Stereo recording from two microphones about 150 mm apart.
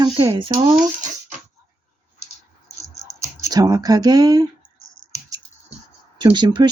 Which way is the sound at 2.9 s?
20° right (ahead or behind).